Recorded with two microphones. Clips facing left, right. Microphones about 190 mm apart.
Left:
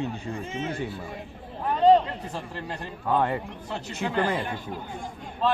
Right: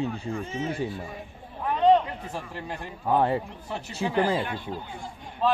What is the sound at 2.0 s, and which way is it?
Speech, 10° right (ahead or behind).